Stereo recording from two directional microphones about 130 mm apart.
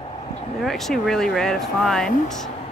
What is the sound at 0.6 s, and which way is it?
Speech, centre (ahead or behind).